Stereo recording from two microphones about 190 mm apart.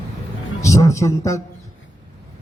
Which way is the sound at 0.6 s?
15° left (ahead or behind).